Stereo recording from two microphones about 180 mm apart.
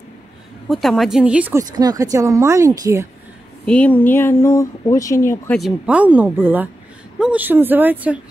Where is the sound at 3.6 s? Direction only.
5° left (ahead or behind).